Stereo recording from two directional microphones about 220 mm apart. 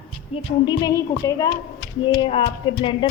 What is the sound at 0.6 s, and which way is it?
A woman's voice, 15° left (ahead or behind).